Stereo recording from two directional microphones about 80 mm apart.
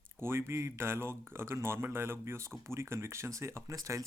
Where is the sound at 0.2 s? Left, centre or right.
Right.